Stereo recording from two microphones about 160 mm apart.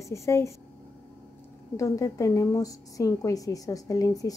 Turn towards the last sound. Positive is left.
turn(degrees=20)  # may be behind; listen again after turning